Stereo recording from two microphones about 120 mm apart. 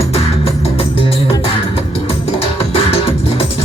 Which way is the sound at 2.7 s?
55° left (ahead or behind).